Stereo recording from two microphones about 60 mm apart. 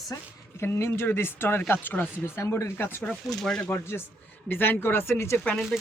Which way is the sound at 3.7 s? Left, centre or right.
Left.